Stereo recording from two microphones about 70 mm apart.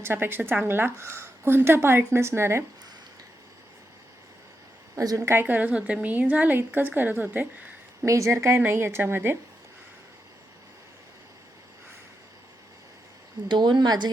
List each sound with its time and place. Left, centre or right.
0.0 s a woman's voice: right
4.9 s a woman's voice: right
5.3 s a woman's voice: right
8.0 s a woman's voice: right
13.5 s speech: right